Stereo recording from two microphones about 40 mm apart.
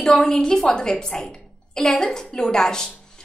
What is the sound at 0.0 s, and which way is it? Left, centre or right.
A woman's voice, centre.